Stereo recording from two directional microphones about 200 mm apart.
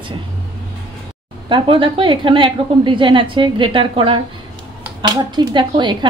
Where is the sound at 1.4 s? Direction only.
25° right (ahead or behind).